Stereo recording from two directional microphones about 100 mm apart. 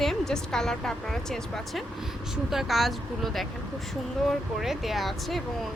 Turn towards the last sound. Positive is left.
turn(degrees=0)  # may be behind; listen again after turning